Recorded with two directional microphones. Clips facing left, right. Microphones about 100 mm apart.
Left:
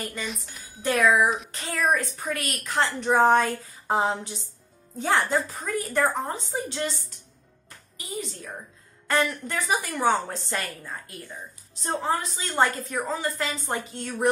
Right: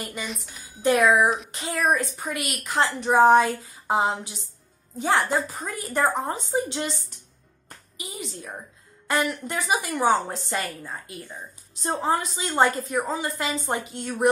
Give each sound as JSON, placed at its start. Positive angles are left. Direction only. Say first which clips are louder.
{"t": 0.1, "sound": "speech", "louder": "right 1 dB", "side_deg": 0}
{"t": 1.5, "sound": "a woman's voice", "louder": "right 1 dB", "side_deg": -15}
{"t": 9.0, "sound": "a woman's voice", "louder": "even", "side_deg": -10}